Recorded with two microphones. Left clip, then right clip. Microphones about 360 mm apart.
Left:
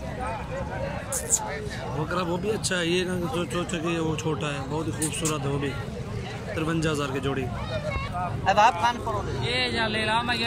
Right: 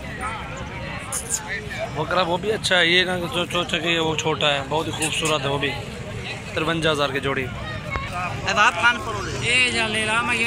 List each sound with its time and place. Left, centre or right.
2.1 s speech: centre
8.5 s speech: left